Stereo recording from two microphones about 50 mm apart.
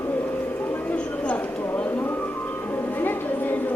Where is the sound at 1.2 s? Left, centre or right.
Left.